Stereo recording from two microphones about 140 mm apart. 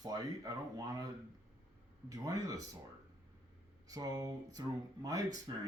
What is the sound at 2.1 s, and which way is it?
Speech, 25° right (ahead or behind).